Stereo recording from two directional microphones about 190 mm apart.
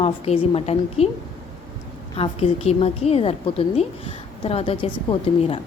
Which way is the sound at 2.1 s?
30° left (ahead or behind).